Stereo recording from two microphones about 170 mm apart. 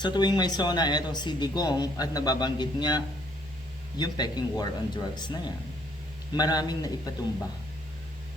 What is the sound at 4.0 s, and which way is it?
Speech, 25° left (ahead or behind).